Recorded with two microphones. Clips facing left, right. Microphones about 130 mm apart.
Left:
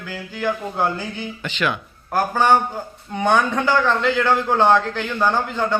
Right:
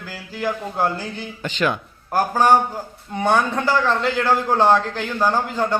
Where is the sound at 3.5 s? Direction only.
35° right (ahead or behind).